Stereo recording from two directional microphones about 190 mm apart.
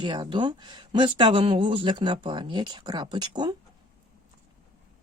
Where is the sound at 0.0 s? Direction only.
25° right (ahead or behind).